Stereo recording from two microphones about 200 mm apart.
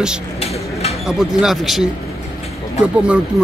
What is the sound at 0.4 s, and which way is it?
Bird, 30° left (ahead or behind).